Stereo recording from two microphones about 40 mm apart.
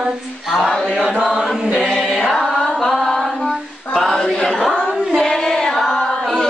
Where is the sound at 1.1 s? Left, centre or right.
Right.